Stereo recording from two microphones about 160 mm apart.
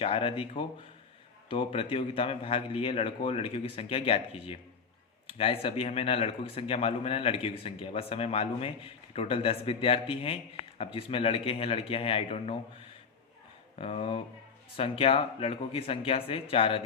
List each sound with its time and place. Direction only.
0.0 s a man's voice: 35° left (ahead or behind)